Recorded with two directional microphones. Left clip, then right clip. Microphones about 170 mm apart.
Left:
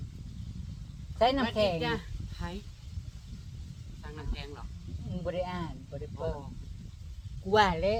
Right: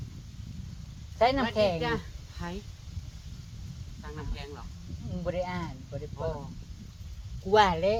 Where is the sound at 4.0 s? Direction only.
5° right (ahead or behind).